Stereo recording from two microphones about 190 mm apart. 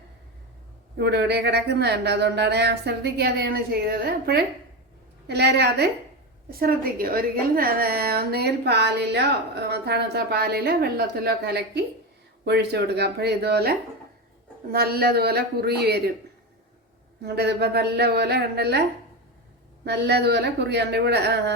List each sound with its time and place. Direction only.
0.9 s a woman's voice: 60° right (ahead or behind)
17.2 s a woman's voice: 60° right (ahead or behind)
19.8 s a woman's voice: 60° right (ahead or behind)